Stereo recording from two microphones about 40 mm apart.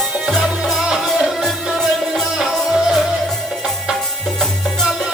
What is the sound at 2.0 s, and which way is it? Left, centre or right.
Music, centre.